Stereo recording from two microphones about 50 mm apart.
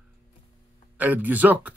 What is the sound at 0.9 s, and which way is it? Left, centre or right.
Speech, right.